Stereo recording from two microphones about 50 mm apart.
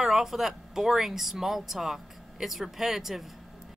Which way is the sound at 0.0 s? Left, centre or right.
Centre.